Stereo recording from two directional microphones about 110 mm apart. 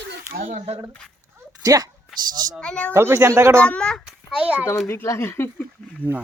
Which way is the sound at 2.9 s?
25° right (ahead or behind).